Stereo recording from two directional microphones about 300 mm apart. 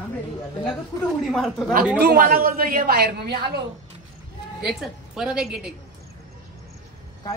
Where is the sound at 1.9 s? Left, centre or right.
Right.